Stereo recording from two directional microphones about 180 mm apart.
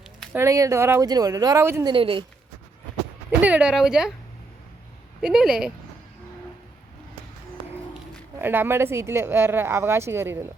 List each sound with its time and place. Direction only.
0.3 s speech: 15° right (ahead or behind)
1.9 s a woman's voice: 30° right (ahead or behind)
3.4 s speech: 5° right (ahead or behind)
5.2 s speech: 5° right (ahead or behind)
8.4 s speech: 10° right (ahead or behind)